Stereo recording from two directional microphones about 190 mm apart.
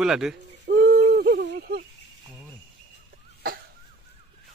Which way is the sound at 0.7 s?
60° right (ahead or behind).